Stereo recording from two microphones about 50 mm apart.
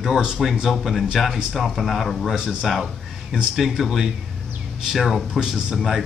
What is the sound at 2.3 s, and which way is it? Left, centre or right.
Speech, centre.